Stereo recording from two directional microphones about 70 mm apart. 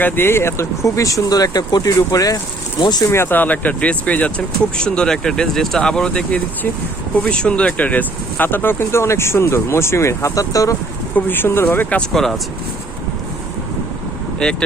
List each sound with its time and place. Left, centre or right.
0.0 s speech: left
3.1 s speech: left
11.1 s speech: left
12.1 s speech: centre
14.4 s speech: centre